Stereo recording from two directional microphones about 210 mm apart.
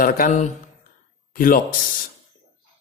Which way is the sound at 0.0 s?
40° left (ahead or behind).